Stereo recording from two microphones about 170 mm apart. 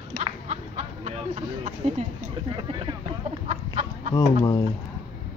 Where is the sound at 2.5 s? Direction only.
30° right (ahead or behind).